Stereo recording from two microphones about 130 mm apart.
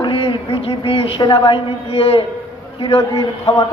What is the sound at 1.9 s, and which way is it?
A woman's voice, 50° left (ahead or behind).